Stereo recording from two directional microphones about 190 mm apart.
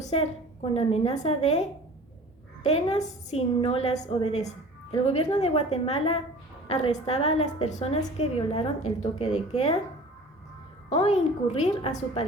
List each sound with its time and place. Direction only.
0.1 s a woman's voice: 30° left (ahead or behind)
2.6 s a woman's voice: 35° left (ahead or behind)
10.8 s a woman's voice: 35° left (ahead or behind)